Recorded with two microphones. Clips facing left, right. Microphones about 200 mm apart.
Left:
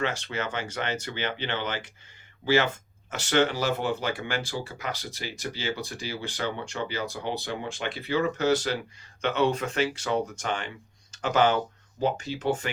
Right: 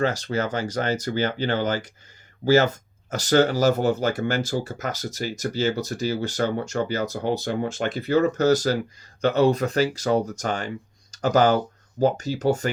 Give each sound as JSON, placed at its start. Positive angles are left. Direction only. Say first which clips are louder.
{"t": 0.0, "sound": "speech", "louder": "right 6 dB", "side_deg": -40}